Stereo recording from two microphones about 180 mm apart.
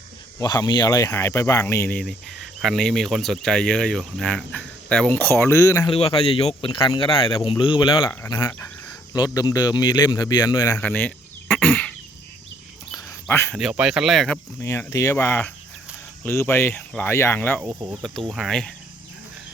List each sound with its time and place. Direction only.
0.3 s speech: 20° left (ahead or behind)
5.9 s speech: 30° left (ahead or behind)
10.8 s a sound: 10° left (ahead or behind)
13.2 s speech: 15° left (ahead or behind)
13.5 s speech: 5° right (ahead or behind)
14.6 s speech: 15° left (ahead or behind)
17.6 s speech: 15° right (ahead or behind)
18.3 s speech: centre (ahead or behind)